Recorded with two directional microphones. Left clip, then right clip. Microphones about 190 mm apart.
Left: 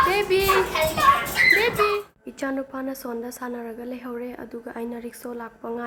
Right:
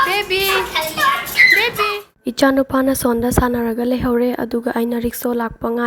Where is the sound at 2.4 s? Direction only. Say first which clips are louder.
Right 14 dB; 40° right (ahead or behind).